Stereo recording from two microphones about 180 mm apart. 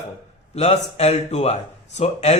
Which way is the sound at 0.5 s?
35° left (ahead or behind).